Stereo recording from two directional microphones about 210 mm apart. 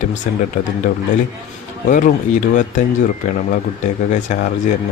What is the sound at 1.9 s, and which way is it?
Speech, 40° left (ahead or behind).